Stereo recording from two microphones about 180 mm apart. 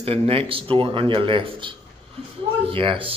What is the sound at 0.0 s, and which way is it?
Speech, 30° right (ahead or behind).